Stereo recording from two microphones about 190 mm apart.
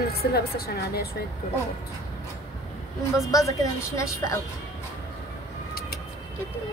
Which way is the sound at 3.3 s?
15° left (ahead or behind).